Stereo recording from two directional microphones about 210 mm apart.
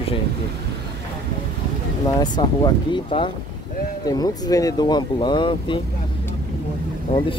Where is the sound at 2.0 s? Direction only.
20° left (ahead or behind).